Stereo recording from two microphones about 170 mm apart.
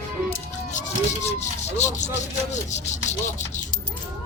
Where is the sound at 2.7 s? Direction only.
45° left (ahead or behind).